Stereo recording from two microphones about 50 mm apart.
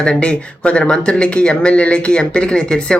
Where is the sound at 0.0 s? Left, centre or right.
Centre.